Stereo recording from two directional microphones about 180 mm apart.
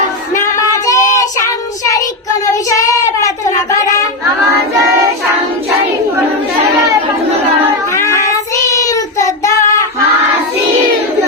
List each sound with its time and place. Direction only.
0.3 s a sound: 15° left (ahead or behind)
2.5 s child singing: 20° left (ahead or behind)
7.9 s child singing: 15° left (ahead or behind)